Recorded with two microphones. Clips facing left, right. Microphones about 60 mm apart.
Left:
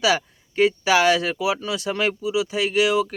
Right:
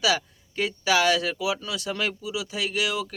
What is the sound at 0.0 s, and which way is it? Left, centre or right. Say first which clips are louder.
Speech: left 4 dB; centre.